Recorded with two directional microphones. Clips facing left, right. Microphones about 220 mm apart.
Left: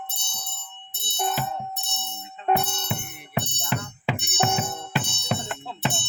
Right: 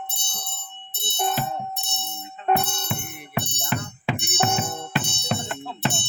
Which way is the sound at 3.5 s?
15° right (ahead or behind).